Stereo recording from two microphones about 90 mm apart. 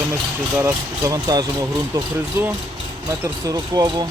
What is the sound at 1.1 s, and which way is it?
Speech, 45° right (ahead or behind).